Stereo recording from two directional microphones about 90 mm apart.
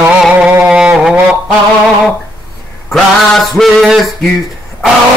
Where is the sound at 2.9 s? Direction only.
5° left (ahead or behind).